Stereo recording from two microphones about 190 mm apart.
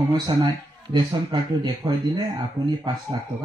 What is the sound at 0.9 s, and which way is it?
Speech, 20° right (ahead or behind).